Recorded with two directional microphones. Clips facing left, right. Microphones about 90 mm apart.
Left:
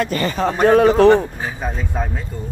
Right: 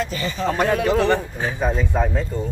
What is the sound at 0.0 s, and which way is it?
Speech, 55° left (ahead or behind).